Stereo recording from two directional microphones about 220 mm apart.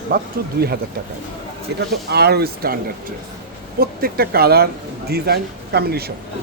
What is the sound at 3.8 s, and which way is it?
Speech, 45° right (ahead or behind).